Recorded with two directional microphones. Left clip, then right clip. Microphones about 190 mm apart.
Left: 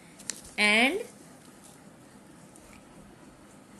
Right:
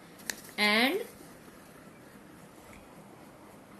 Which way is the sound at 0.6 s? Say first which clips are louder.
Left 3 dB; 30° left (ahead or behind).